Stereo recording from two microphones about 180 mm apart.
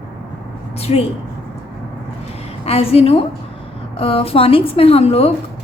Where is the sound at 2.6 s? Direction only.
35° left (ahead or behind).